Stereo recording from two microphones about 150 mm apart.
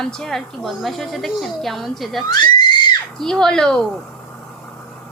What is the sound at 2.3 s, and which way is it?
Screaming, 30° left (ahead or behind).